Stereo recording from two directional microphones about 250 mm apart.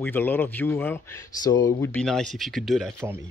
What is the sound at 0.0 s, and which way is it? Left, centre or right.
Speech, centre.